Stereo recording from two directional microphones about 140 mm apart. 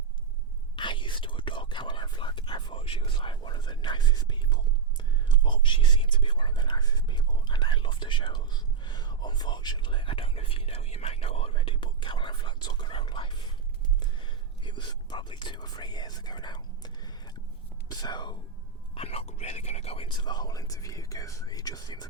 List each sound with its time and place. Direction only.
0.8 s whispering: 35° left (ahead or behind)
17.8 s speech: 30° left (ahead or behind)
18.9 s speech: 45° left (ahead or behind); by 22.0 s 30° left (ahead or behind)